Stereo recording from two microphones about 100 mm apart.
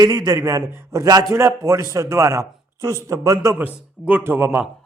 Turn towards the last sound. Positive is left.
turn(degrees=-20)  # may be behind; listen again after turning